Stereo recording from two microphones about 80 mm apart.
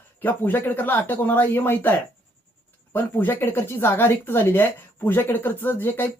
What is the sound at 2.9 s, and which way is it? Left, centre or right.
Speech, left.